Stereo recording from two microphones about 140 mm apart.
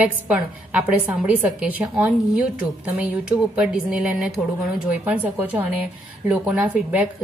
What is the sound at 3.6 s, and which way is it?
A woman's voice, 5° right (ahead or behind).